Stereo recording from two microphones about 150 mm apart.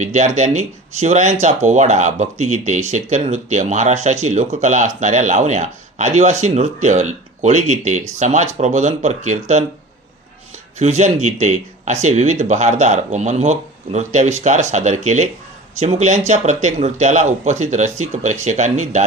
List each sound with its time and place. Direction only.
0.0 s speech: 55° right (ahead or behind)
10.8 s speech: 50° right (ahead or behind)